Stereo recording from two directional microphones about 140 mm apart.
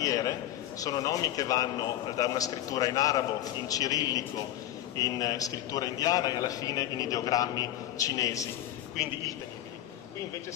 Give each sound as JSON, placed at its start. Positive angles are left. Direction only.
{"t": 0.0, "sound": "a man's voice", "side_deg": 25}